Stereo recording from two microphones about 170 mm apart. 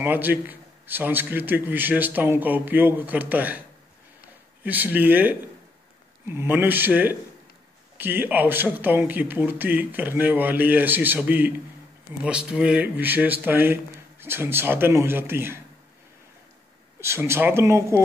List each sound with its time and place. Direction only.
0.0 s a man's voice: 10° right (ahead or behind)
4.6 s a man's voice: 10° right (ahead or behind)
17.0 s a man's voice: 15° right (ahead or behind)